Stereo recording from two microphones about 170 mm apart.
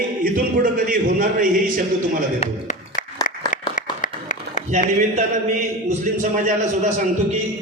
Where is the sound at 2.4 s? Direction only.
45° left (ahead or behind).